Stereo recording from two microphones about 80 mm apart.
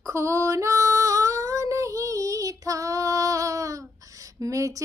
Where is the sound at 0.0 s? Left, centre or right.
Right.